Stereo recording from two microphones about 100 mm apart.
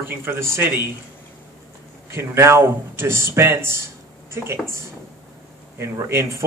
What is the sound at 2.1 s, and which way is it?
A man's voice, 25° right (ahead or behind).